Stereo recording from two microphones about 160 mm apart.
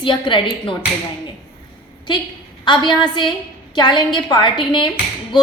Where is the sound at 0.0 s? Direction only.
30° left (ahead or behind).